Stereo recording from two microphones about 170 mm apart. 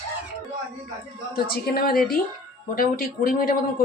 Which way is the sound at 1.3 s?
60° left (ahead or behind).